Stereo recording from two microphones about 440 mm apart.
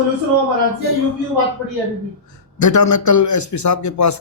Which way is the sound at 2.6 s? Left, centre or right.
Left.